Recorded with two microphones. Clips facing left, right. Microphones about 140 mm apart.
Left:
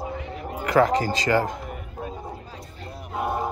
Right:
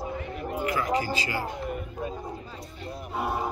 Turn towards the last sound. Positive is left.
turn(degrees=0)  # may be behind; listen again after turning